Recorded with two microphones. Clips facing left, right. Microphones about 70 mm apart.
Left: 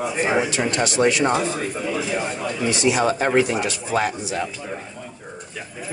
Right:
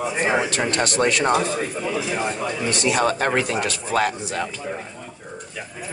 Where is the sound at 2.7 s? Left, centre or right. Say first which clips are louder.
Left 1 dB; right.